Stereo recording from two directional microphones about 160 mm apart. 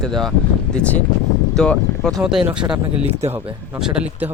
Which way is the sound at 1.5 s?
5° left (ahead or behind).